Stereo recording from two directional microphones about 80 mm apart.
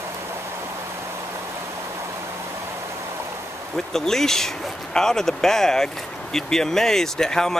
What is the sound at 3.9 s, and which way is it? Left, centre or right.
Speech, centre.